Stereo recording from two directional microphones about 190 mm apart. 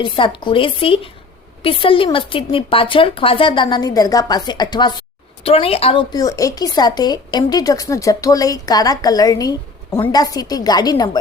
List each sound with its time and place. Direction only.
0.0 s a woman's voice: 25° left (ahead or behind)